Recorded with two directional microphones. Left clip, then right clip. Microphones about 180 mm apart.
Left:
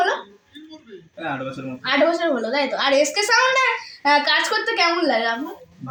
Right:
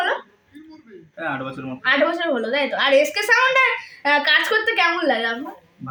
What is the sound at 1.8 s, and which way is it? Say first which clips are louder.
A woman's voice: even; 20° right (ahead or behind).